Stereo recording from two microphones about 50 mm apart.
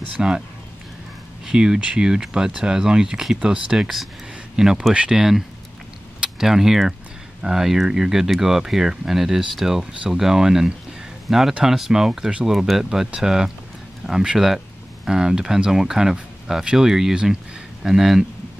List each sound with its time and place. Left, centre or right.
0.2 s speech: right
1.4 s speech: centre